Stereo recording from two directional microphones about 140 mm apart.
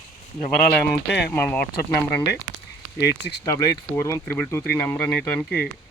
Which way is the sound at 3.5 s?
25° left (ahead or behind).